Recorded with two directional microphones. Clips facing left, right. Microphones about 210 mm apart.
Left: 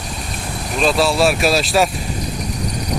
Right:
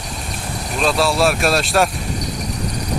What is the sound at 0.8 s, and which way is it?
Speech, centre (ahead or behind).